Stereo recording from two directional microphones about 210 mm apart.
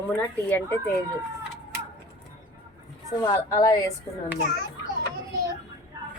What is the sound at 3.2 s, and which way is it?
Speech, 20° left (ahead or behind).